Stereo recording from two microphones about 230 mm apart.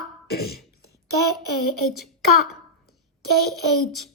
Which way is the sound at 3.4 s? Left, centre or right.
Left.